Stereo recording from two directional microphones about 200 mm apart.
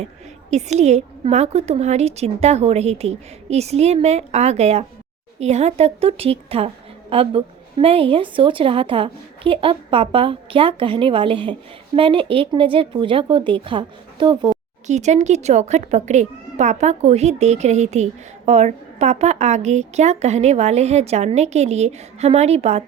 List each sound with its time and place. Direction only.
0.5 s a child's voice: 35° right (ahead or behind)
14.8 s a child's voice: 35° right (ahead or behind)